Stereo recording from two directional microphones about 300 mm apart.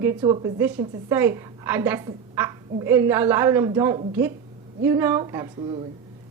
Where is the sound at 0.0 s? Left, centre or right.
Centre.